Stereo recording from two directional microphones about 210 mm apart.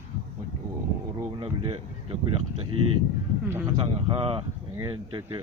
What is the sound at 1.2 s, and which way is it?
Speech, 25° right (ahead or behind).